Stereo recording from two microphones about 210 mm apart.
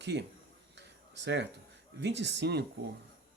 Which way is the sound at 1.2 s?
55° right (ahead or behind).